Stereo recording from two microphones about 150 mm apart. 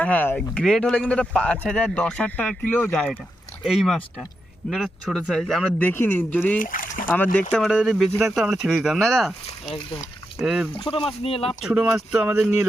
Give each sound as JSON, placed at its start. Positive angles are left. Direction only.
{"t": 0.0, "sound": "speech", "side_deg": 10}
{"t": 5.9, "sound": "speech", "side_deg": 15}
{"t": 6.6, "sound": "boat", "side_deg": 65}
{"t": 7.5, "sound": "speech", "side_deg": 0}
{"t": 9.6, "sound": "speech", "side_deg": 35}
{"t": 10.4, "sound": "speech", "side_deg": -5}
{"t": 10.8, "sound": "speech", "side_deg": 40}
{"t": 11.4, "sound": "speech", "side_deg": -5}